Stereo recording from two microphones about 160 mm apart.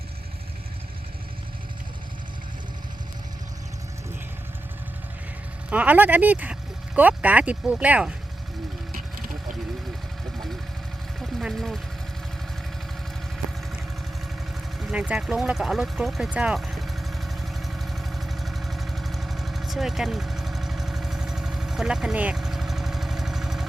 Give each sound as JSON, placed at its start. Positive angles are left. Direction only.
{"t": 5.7, "sound": "speech", "side_deg": -10}
{"t": 8.9, "sound": "vehicle", "side_deg": -60}
{"t": 11.2, "sound": "vehicle", "side_deg": 0}
{"t": 14.8, "sound": "vehicle", "side_deg": -5}